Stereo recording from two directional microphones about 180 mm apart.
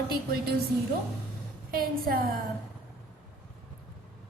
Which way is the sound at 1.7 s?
55° right (ahead or behind).